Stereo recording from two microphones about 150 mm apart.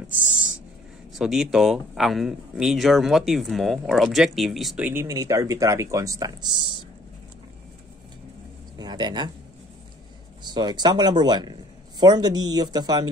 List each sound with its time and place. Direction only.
0.1 s writing: 10° right (ahead or behind)
1.1 s speech: 5° right (ahead or behind)
4.8 s speech: 20° right (ahead or behind)
8.7 s speech: 30° right (ahead or behind)
10.4 s speech: 30° right (ahead or behind)